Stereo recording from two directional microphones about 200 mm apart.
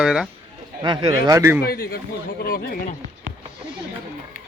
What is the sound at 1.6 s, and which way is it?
A man's voice, 50° left (ahead or behind).